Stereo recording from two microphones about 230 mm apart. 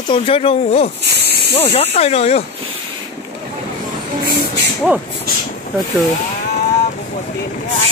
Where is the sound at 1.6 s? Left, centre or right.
Left.